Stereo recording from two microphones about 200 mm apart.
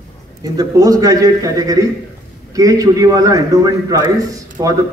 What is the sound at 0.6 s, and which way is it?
A man's voice, 15° right (ahead or behind).